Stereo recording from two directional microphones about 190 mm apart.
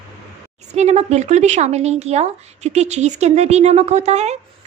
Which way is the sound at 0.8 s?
35° right (ahead or behind).